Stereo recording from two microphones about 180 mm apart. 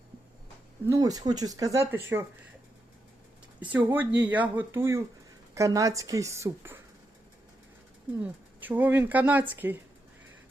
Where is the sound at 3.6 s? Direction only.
10° right (ahead or behind).